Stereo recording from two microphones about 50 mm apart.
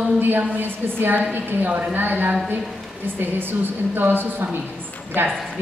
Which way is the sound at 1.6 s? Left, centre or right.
Right.